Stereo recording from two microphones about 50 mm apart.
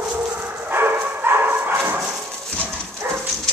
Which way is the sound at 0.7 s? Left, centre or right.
Right.